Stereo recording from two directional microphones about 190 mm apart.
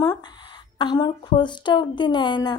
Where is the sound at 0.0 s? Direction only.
25° left (ahead or behind).